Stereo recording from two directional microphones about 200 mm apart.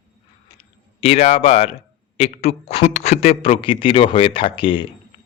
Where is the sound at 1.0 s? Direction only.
30° left (ahead or behind).